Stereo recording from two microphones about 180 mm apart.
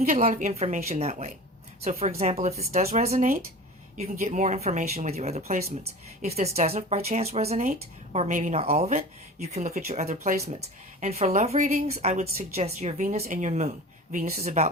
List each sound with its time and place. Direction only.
0.2 s speech: 40° right (ahead or behind)